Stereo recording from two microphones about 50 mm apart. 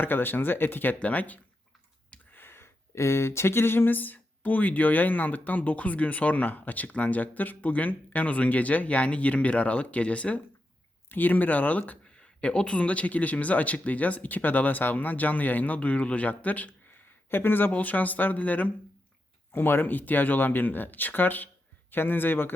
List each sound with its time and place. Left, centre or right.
0.0 s speech: left
0.9 s speech: left
2.3 s a sound: left
2.9 s speech: left
12.2 s speech: centre
17.3 s speech: left
17.7 s speech: left
19.5 s speech: left